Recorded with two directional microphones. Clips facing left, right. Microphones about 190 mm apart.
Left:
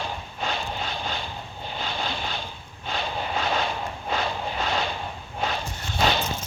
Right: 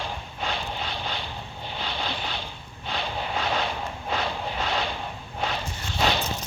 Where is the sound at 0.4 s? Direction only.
45° left (ahead or behind).